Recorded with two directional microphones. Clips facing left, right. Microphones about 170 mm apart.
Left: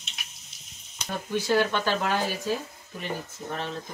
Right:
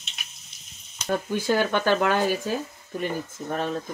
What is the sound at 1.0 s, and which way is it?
Speech, 50° right (ahead or behind).